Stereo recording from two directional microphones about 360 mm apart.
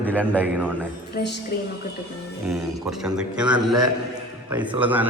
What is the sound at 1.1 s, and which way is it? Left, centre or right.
Speech, left.